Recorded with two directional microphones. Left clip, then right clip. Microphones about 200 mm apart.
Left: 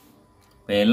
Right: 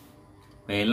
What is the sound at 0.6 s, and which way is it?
Speech, 25° left (ahead or behind).